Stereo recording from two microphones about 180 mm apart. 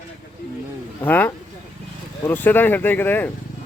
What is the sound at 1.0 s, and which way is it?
A man's voice, 10° left (ahead or behind).